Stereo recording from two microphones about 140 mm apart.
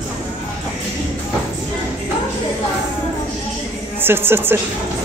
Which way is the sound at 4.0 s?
15° right (ahead or behind).